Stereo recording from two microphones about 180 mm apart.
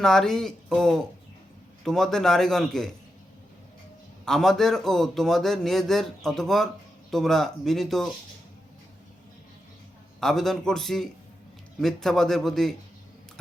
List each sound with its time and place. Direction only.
0.0 s speech: 5° left (ahead or behind)
4.3 s speech: centre (ahead or behind)
10.2 s speech: centre (ahead or behind)